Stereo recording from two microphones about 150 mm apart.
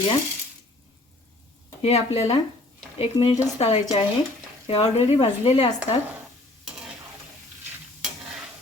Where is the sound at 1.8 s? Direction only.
45° left (ahead or behind).